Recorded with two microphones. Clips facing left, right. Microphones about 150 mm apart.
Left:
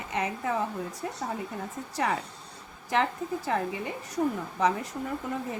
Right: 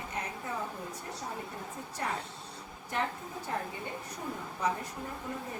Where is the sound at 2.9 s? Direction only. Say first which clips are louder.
Left 8 dB; 90° left.